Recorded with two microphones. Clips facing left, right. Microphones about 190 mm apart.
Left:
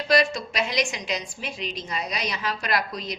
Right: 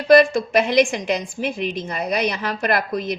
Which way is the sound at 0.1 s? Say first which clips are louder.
Right 10 dB; 55° right (ahead or behind).